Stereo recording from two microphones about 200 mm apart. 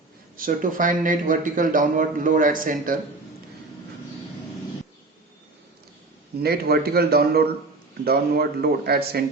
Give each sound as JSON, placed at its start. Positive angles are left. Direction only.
{"t": 0.3, "sound": "a man's voice", "side_deg": -45}
{"t": 6.4, "sound": "speech", "side_deg": -50}